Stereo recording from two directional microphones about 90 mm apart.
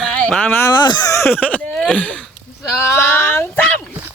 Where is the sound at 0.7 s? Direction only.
55° left (ahead or behind).